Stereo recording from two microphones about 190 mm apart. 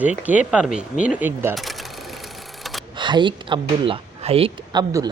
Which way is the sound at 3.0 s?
25° right (ahead or behind).